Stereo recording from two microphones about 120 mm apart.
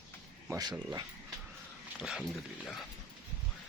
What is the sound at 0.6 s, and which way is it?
Speech, 35° right (ahead or behind).